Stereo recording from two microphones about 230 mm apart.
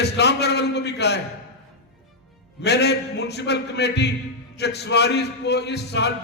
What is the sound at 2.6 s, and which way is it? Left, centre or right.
A man's voice, left.